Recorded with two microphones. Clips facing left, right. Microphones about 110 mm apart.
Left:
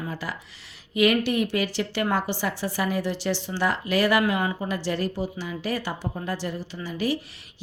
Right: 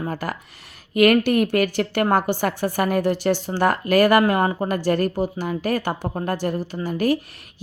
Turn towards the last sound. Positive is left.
turn(degrees=-50)  # may be behind; listen again after turning